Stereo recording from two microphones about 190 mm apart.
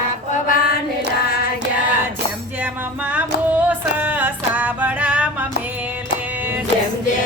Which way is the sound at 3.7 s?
10° right (ahead or behind).